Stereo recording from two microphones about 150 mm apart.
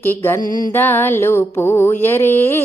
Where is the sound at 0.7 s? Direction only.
15° left (ahead or behind).